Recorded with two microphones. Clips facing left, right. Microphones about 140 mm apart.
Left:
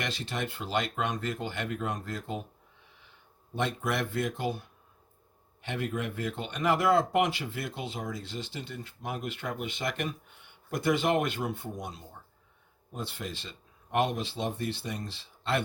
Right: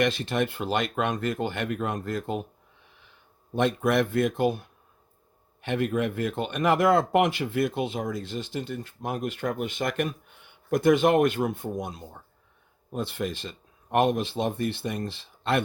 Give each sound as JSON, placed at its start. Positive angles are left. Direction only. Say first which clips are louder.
{"t": 0.0, "sound": "speech", "louder": "right 9 dB", "side_deg": -55}
{"t": 3.5, "sound": "speech", "louder": "right 8 dB", "side_deg": -55}